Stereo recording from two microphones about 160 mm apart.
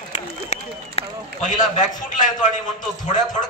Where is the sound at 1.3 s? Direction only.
50° left (ahead or behind).